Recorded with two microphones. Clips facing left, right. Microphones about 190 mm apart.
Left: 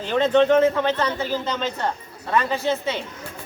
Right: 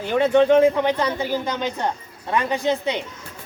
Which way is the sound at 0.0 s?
10° right (ahead or behind).